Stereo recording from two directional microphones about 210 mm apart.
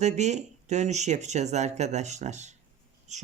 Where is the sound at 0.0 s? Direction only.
35° right (ahead or behind).